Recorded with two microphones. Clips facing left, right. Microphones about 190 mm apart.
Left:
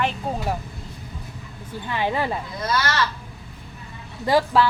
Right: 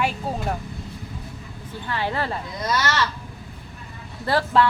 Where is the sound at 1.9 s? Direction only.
15° left (ahead or behind).